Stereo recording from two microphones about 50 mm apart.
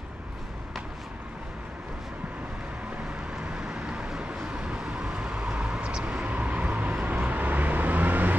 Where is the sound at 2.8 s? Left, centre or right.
Right.